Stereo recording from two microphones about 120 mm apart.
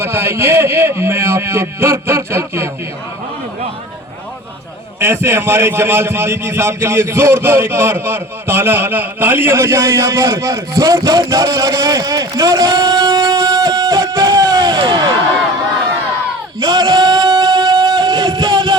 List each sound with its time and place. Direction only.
0.0 s a man's voice: 20° right (ahead or behind)
4.9 s a man's voice: 20° right (ahead or behind); by 15.1 s 40° right (ahead or behind)
16.6 s a sound: 40° right (ahead or behind)